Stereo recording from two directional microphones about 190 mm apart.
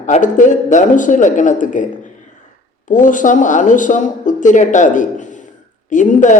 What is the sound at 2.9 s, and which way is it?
A man's voice, 45° left (ahead or behind).